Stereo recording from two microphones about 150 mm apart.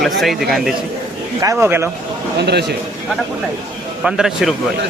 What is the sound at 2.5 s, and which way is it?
Speech, 90° right.